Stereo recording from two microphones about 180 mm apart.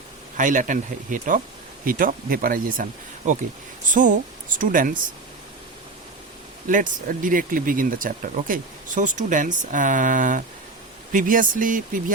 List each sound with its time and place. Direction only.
0.3 s speech: 45° right (ahead or behind)
6.7 s speech: 50° right (ahead or behind)